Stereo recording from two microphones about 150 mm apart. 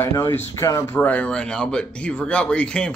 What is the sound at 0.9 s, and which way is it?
Speech, 10° left (ahead or behind).